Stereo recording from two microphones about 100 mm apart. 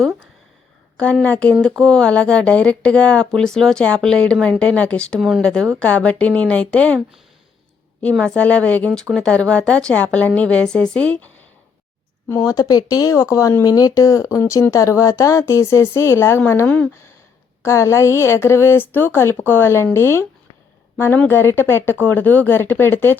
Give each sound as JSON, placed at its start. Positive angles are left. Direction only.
{"t": 0.9, "sound": "speech", "side_deg": 10}
{"t": 8.2, "sound": "speech", "side_deg": 10}
{"t": 12.5, "sound": "speech", "side_deg": 40}
{"t": 17.6, "sound": "speech", "side_deg": 30}